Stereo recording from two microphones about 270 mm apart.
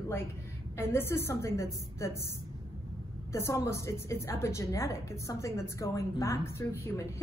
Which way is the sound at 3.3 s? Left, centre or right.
Centre.